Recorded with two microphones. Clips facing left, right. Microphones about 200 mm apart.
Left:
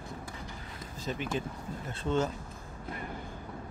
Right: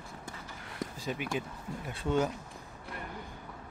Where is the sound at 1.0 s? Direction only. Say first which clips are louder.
Left 2 dB; 10° right (ahead or behind).